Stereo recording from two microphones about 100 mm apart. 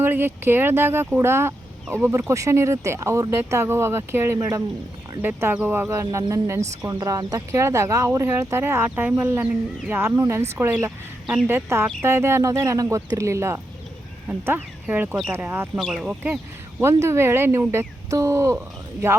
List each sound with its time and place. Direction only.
0.0 s speech: 20° right (ahead or behind)
14.4 s speech: 20° right (ahead or behind)
15.8 s speech: 5° right (ahead or behind)
16.8 s speech: 25° right (ahead or behind)